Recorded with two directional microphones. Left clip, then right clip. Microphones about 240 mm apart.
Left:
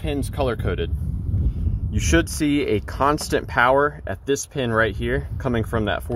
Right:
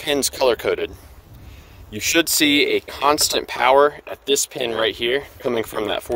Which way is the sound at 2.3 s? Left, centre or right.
Right.